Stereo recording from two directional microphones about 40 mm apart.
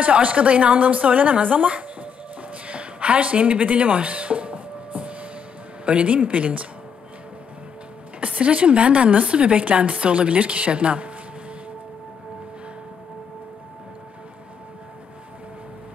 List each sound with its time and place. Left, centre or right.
0.0 s speech: right
2.5 s music: right
5.9 s speech: right
8.4 s speech: right